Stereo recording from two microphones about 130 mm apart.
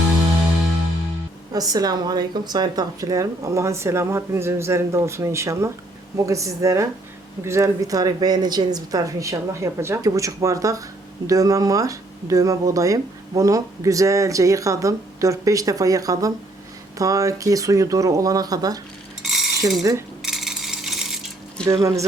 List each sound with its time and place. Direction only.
1.5 s speech: 30° right (ahead or behind)
19.2 s mechanisms: centre (ahead or behind)
19.8 s speech: 25° right (ahead or behind)
20.2 s a sound: centre (ahead or behind)
21.7 s speech: 25° right (ahead or behind)